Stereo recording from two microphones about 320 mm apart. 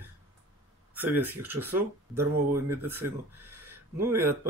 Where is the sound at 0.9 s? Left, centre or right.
Centre.